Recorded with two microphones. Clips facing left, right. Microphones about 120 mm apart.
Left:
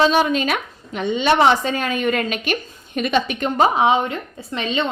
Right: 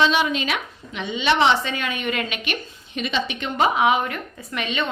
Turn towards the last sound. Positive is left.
turn(degrees=30)  # may be behind; listen again after turning